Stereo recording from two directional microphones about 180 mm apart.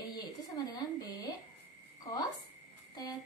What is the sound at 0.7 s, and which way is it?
Speech, 20° left (ahead or behind).